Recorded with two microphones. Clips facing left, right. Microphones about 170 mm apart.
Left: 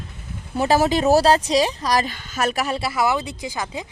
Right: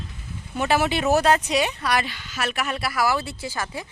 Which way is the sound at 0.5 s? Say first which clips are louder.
Left 4 dB; 35° left (ahead or behind).